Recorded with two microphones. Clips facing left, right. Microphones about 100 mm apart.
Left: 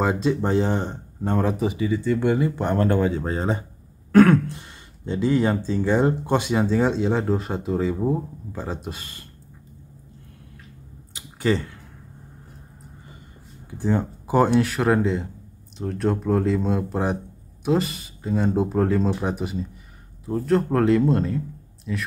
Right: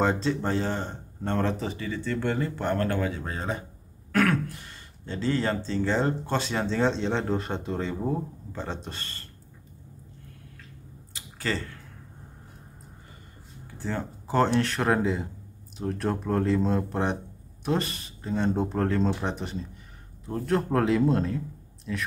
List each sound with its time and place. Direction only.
0.0 s speech: 10° left (ahead or behind)
11.1 s a sound: 20° left (ahead or behind)
13.7 s speech: 15° left (ahead or behind)